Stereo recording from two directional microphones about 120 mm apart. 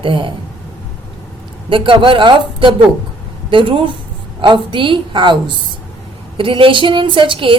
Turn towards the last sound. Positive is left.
turn(degrees=-45)  # may be behind; listen again after turning